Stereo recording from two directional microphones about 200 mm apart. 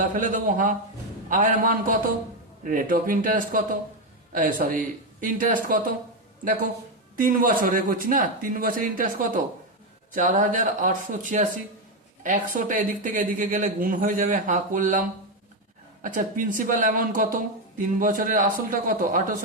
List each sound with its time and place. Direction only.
0.0 s speech: 40° right (ahead or behind)